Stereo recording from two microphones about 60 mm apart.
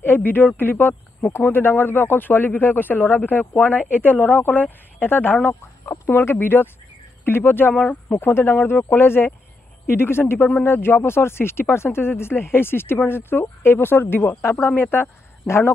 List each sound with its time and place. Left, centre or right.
0.0 s a sound: left
0.6 s speech: left
7.7 s speech: centre
8.1 s a man's voice: left